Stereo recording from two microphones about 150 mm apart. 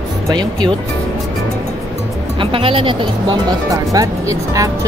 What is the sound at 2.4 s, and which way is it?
Speech, 35° right (ahead or behind).